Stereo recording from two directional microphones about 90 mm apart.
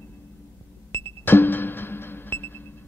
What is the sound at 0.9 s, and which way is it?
Music, 25° left (ahead or behind).